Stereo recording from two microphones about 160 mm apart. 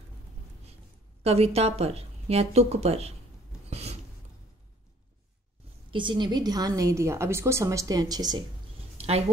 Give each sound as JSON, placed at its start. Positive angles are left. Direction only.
{"t": 1.2, "sound": "speech", "side_deg": -40}
{"t": 5.9, "sound": "a woman's voice", "side_deg": -30}
{"t": 8.9, "sound": "a sound", "side_deg": -40}